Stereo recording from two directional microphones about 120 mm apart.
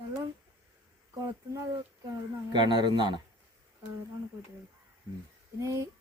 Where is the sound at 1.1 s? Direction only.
25° right (ahead or behind).